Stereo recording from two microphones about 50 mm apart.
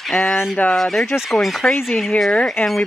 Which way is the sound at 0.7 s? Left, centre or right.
Centre.